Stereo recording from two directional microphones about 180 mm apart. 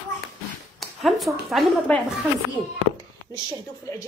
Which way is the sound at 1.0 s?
Centre (ahead or behind).